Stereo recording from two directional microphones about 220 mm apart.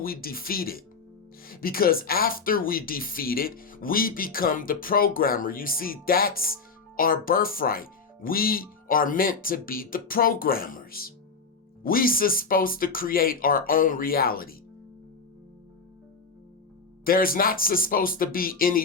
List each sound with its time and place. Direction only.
0.0 s speech: 40° left (ahead or behind)
17.0 s speech: 40° left (ahead or behind)